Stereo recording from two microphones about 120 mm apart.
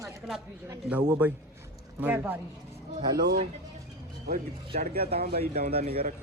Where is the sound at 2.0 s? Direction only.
15° right (ahead or behind).